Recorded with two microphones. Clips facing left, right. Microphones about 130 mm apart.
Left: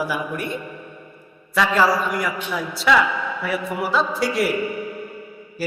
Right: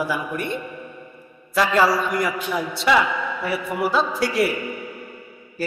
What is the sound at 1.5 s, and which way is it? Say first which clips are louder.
Speech: even; centre (ahead or behind).